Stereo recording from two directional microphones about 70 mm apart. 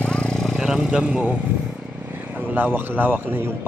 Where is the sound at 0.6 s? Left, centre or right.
Centre.